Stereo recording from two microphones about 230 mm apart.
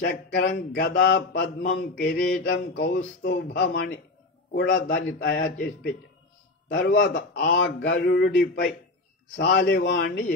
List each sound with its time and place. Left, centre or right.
0.0 s speech: left